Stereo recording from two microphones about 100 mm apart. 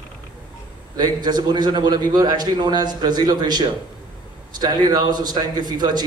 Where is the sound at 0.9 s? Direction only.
45° right (ahead or behind).